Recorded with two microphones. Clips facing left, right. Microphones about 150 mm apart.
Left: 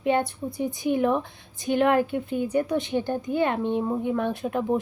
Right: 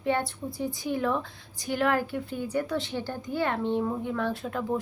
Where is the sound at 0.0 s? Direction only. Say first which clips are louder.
Left 4 dB; 20° left (ahead or behind).